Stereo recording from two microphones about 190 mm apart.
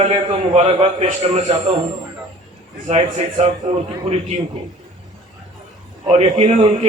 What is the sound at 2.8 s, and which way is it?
Speech, 40° right (ahead or behind).